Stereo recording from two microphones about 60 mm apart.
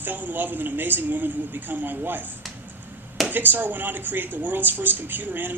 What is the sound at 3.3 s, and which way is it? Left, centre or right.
A man's voice, right.